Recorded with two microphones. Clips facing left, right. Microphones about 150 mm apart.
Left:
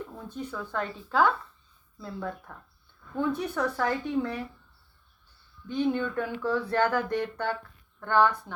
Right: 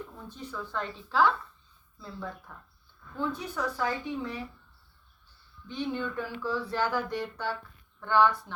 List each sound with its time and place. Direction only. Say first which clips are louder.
0.3 s a woman's voice: left 5 dB; 55° left (ahead or behind)
3.2 s speech: left 5 dB; 60° left (ahead or behind)
5.6 s a woman's voice: left 6 dB; 50° left (ahead or behind)